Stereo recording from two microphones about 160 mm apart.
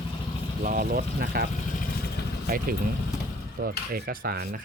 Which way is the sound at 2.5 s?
65° right (ahead or behind).